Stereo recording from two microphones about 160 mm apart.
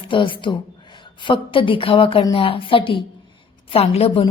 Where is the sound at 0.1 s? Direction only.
30° left (ahead or behind).